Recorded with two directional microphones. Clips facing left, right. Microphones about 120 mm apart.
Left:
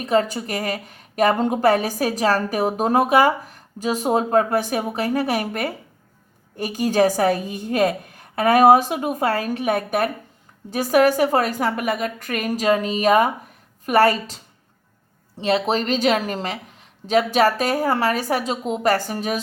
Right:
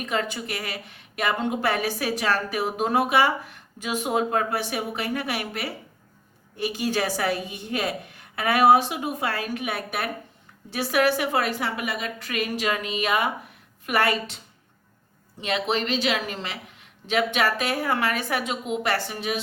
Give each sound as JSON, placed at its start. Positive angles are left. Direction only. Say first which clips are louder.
{"t": 0.0, "sound": "a woman's voice", "louder": "left 8 dB", "side_deg": 40}
{"t": 15.4, "sound": "a woman's voice", "louder": "left 5 dB", "side_deg": 35}